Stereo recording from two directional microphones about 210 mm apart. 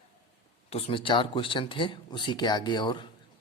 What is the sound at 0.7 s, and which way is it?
A man's voice, 25° left (ahead or behind).